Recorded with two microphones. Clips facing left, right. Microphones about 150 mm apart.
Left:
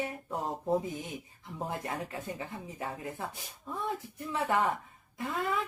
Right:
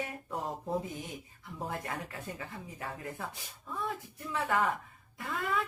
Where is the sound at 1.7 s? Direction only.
20° left (ahead or behind).